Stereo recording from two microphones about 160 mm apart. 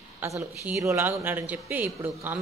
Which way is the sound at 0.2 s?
15° right (ahead or behind).